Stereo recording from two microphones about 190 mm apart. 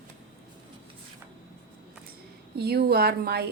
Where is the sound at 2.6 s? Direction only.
55° right (ahead or behind).